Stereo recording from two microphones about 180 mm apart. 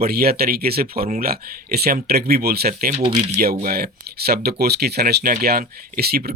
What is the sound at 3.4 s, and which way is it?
Speech, 55° right (ahead or behind).